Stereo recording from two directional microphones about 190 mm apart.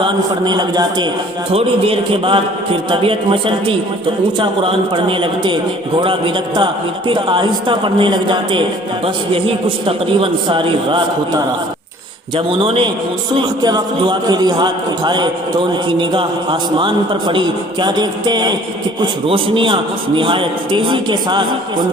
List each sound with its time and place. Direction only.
0.0 s a man's voice: 25° right (ahead or behind)
12.5 s a man's voice: 30° right (ahead or behind)